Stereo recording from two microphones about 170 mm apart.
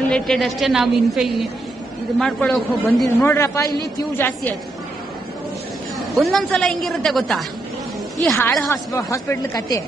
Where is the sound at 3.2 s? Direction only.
15° left (ahead or behind).